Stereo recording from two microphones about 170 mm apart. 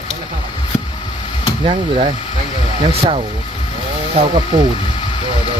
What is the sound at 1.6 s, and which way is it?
Speech, 30° right (ahead or behind).